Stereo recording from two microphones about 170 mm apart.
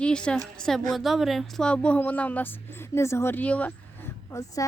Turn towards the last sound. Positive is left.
turn(degrees=20)  # may be behind; listen again after turning